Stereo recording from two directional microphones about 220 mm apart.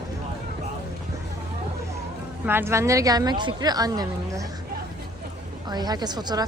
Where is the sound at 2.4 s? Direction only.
10° right (ahead or behind).